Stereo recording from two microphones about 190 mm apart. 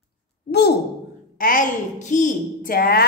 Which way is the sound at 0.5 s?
60° left (ahead or behind).